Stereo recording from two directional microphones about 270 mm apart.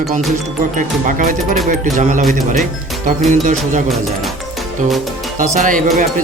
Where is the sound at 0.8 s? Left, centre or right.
Right.